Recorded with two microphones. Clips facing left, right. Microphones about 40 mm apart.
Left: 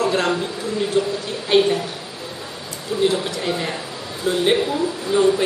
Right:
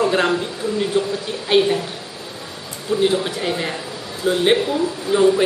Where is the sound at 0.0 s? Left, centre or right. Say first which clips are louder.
Right 2 dB; centre.